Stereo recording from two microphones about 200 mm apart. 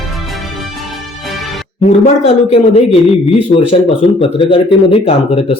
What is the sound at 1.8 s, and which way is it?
Speech, 30° left (ahead or behind).